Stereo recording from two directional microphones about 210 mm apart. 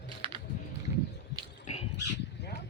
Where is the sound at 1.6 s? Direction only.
30° left (ahead or behind).